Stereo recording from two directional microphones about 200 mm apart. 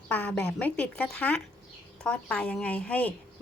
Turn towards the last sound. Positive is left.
turn(degrees=5)  # may be behind; listen again after turning